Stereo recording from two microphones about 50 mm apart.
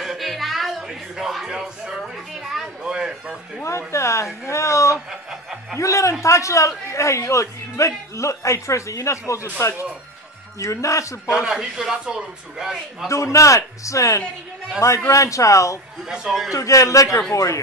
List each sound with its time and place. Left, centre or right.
0.0 s music: centre
0.8 s a sound: centre
3.6 s speech: left
4.5 s a sound: left
5.3 s snicker: centre
5.8 s speech: left
10.6 s speech: left
11.2 s a man's voice: centre
13.1 s speech: left
16.0 s a man's voice: centre
16.5 s speech: left